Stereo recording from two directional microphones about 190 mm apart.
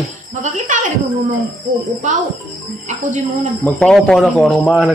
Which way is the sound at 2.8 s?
40° right (ahead or behind).